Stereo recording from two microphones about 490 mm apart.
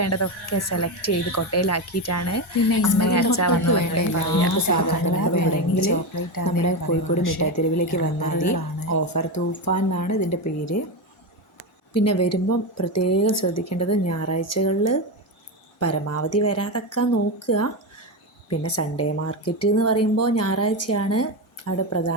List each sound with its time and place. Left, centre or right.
0.0 s speech: left
12.0 s speech: left